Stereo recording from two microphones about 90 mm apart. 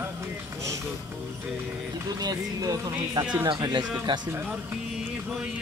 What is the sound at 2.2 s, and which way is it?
Music, 45° right (ahead or behind).